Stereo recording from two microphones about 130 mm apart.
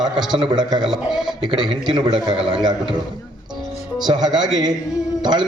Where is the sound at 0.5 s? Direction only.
35° right (ahead or behind).